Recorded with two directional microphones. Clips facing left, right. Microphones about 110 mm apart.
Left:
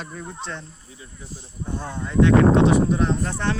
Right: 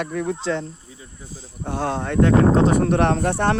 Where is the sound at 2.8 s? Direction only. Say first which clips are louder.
Right 3 dB; 70° right (ahead or behind).